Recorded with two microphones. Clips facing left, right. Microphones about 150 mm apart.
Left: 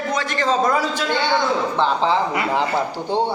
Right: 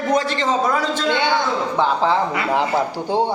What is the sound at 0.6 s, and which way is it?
A man's voice, 5° left (ahead or behind).